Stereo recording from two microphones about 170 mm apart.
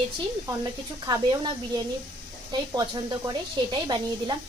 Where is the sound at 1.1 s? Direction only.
20° right (ahead or behind).